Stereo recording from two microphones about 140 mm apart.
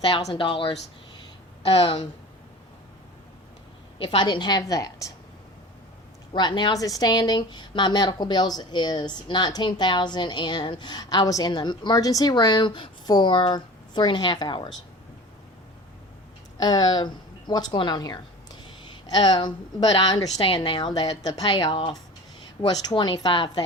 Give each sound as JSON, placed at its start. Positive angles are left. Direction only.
{"t": 0.0, "sound": "speech", "side_deg": 45}
{"t": 3.9, "sound": "speech", "side_deg": 40}
{"t": 6.3, "sound": "speech", "side_deg": 30}
{"t": 16.6, "sound": "a woman's voice", "side_deg": 30}